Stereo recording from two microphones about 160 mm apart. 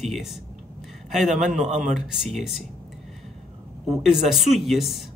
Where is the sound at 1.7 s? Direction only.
50° right (ahead or behind).